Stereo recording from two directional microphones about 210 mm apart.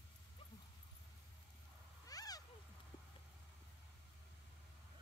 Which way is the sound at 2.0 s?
15° left (ahead or behind).